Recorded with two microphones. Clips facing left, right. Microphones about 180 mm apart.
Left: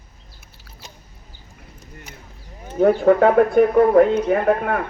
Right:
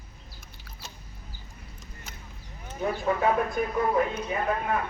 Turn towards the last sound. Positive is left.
turn(degrees=60)  # may be behind; listen again after turning